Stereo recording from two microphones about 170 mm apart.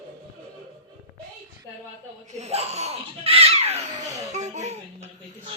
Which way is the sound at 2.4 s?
40° right (ahead or behind).